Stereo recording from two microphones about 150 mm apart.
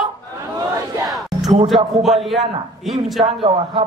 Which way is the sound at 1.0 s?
Centre (ahead or behind).